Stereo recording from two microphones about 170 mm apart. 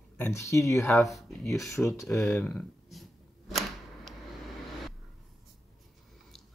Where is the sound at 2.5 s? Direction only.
Centre (ahead or behind).